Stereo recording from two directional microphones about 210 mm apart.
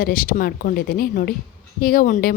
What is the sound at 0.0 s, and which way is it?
Speech, 40° left (ahead or behind).